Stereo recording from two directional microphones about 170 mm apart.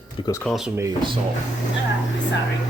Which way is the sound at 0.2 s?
20° left (ahead or behind).